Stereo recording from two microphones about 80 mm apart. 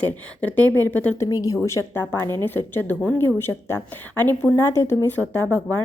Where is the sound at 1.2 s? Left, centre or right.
Left.